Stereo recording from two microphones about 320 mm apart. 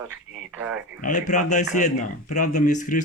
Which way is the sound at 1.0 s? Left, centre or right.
Left.